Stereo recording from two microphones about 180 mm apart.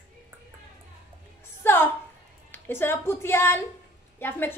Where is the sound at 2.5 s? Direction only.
10° left (ahead or behind).